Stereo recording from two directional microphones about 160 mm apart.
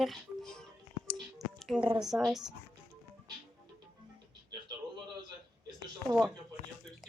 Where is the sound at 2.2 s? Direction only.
Centre (ahead or behind).